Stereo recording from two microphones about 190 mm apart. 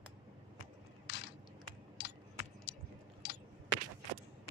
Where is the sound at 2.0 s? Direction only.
65° left (ahead or behind).